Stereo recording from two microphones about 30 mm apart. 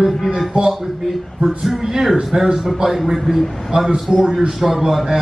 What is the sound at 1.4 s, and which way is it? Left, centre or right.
A man's voice, centre.